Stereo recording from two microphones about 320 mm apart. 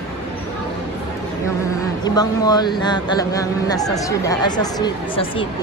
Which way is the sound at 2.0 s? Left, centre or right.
Centre.